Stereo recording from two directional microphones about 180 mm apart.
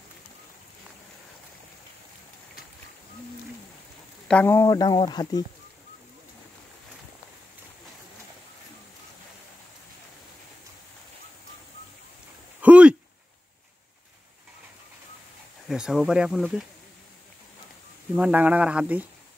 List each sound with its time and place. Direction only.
4.3 s speech: 10° left (ahead or behind)
12.6 s a sound: 5° right (ahead or behind)
15.7 s speech: 5° right (ahead or behind)
18.1 s speech: 10° right (ahead or behind)